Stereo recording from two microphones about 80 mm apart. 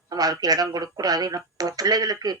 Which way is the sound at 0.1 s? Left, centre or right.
Right.